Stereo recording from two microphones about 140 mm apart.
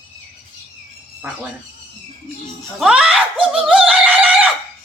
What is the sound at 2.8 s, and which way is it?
Screaming, 5° right (ahead or behind).